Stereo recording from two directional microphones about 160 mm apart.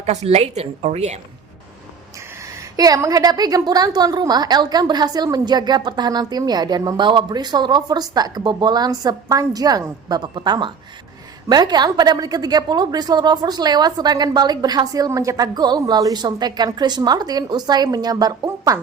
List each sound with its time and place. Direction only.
0.0 s a woman's voice: 40° right (ahead or behind)
2.7 s a woman's voice: 20° right (ahead or behind)